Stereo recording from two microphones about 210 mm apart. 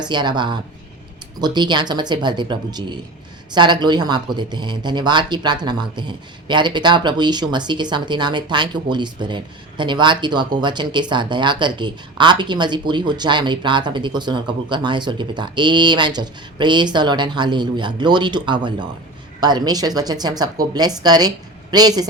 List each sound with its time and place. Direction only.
0.0 s speech: 20° right (ahead or behind)